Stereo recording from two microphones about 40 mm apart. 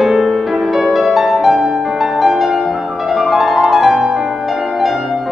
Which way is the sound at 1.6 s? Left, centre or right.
Centre.